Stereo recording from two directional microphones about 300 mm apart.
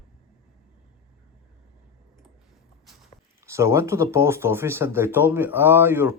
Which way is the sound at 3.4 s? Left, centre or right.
Centre.